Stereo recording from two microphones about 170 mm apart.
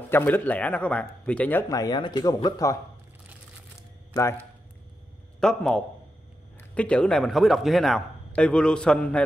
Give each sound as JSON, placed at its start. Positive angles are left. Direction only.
{"t": 0.1, "sound": "speech", "side_deg": 10}
{"t": 4.1, "sound": "a man's voice", "side_deg": 15}
{"t": 5.4, "sound": "speech", "side_deg": 5}